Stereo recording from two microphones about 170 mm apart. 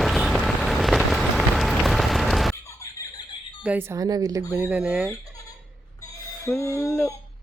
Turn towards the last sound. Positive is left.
turn(degrees=15)  # may be behind; listen again after turning